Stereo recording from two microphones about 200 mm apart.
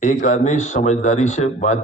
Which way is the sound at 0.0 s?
40° left (ahead or behind).